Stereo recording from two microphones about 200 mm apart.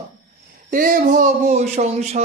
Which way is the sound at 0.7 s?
45° right (ahead or behind).